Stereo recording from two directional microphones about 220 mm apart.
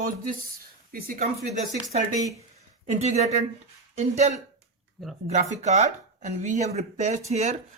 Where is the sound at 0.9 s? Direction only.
40° right (ahead or behind).